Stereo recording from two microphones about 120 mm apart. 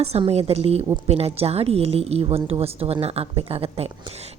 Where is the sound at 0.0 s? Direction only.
60° right (ahead or behind).